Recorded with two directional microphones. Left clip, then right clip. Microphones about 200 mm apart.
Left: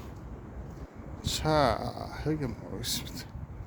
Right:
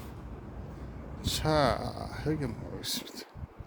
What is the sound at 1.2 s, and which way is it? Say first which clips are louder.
Speech: left 1 dB; 5° left (ahead or behind).